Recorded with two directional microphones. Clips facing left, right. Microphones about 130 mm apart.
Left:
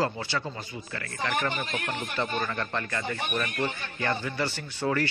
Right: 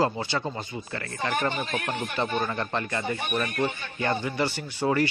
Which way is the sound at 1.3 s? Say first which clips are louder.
Right 2 dB; 20° right (ahead or behind).